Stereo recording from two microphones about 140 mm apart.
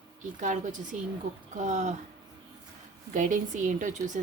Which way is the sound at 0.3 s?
60° right (ahead or behind).